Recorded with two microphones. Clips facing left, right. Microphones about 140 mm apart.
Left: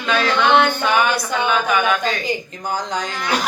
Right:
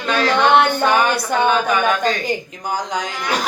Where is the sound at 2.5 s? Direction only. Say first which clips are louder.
Right 1 dB; 10° right (ahead or behind).